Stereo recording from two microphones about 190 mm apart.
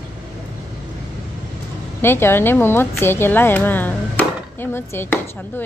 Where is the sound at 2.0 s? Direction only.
10° left (ahead or behind).